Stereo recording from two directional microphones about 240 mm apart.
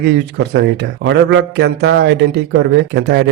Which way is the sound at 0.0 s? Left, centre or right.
Right.